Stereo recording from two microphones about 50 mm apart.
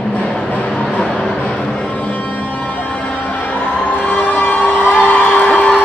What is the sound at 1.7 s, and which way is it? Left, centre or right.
Music, left.